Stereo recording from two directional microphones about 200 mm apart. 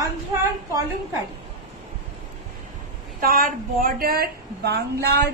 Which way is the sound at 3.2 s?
45° right (ahead or behind).